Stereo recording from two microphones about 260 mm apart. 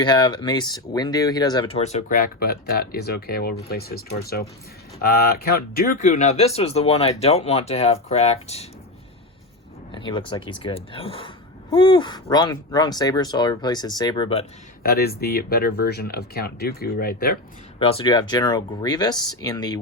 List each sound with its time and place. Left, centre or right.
0.0 s speech: centre
9.9 s speech: centre
14.8 s speech: left
17.7 s speech: left